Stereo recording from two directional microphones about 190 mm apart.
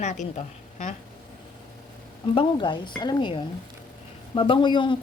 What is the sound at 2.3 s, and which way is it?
A woman's voice, 25° left (ahead or behind).